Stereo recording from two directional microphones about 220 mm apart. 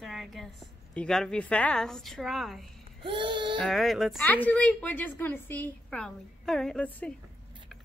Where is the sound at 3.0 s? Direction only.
20° right (ahead or behind).